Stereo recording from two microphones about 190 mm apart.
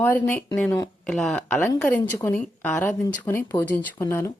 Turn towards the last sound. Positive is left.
turn(degrees=15)  # may be behind; listen again after turning